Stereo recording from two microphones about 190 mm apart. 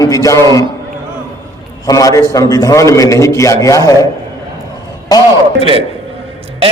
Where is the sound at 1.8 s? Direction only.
15° left (ahead or behind).